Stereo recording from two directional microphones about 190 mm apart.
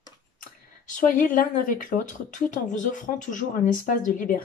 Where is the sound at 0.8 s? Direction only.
45° left (ahead or behind).